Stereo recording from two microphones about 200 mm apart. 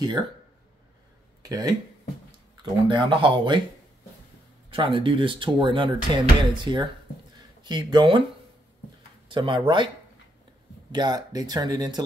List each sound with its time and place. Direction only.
1.4 s speech: 20° right (ahead or behind)
4.6 s speech: 25° right (ahead or behind)
9.3 s speech: 25° right (ahead or behind)
10.9 s speech: 20° right (ahead or behind)